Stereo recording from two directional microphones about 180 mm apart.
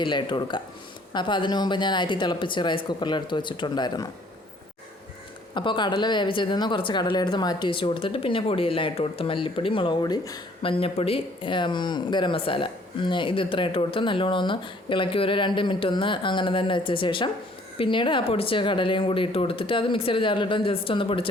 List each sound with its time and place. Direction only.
0.0 s speech: 25° left (ahead or behind)
5.5 s speech: 25° left (ahead or behind)